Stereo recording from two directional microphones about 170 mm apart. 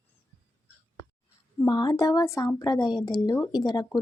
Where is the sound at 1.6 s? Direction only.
25° left (ahead or behind).